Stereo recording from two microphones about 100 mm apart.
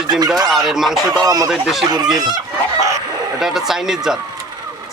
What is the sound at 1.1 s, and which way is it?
Speech, 40° right (ahead or behind).